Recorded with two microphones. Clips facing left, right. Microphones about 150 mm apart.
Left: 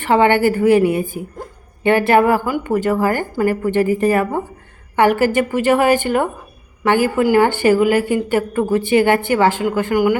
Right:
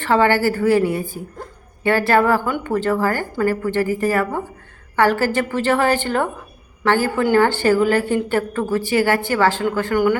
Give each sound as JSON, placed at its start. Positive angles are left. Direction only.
{"t": 0.0, "sound": "a woman's voice", "side_deg": 20}